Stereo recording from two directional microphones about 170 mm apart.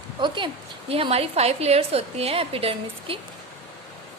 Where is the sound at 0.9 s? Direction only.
35° right (ahead or behind).